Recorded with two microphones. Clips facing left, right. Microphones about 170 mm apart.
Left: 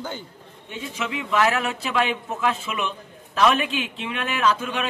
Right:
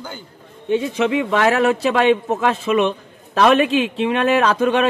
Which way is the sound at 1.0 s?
60° right (ahead or behind).